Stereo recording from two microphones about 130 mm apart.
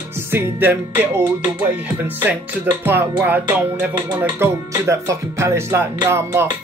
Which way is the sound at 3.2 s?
10° right (ahead or behind).